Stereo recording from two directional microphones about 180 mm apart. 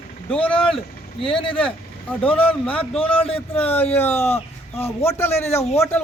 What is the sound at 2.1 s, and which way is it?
A man's voice, 10° left (ahead or behind).